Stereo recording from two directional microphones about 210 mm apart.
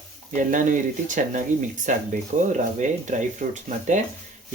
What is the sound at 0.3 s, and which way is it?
Speech, 35° right (ahead or behind).